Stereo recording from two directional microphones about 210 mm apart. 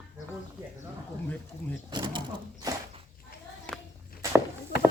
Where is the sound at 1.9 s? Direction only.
20° right (ahead or behind).